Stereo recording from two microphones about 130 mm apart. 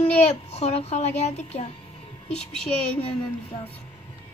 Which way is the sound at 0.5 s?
55° left (ahead or behind).